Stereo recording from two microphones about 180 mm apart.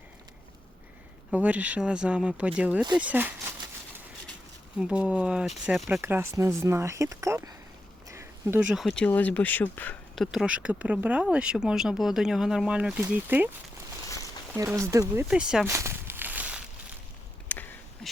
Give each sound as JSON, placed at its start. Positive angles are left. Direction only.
{"t": 1.3, "sound": "speech", "side_deg": -10}
{"t": 4.8, "sound": "speech", "side_deg": -5}
{"t": 6.0, "sound": "speech", "side_deg": -15}
{"t": 10.3, "sound": "speech", "side_deg": -5}
{"t": 14.5, "sound": "speech", "side_deg": -15}
{"t": 15.6, "sound": "a sound", "side_deg": -15}
{"t": 17.5, "sound": "a sound", "side_deg": 10}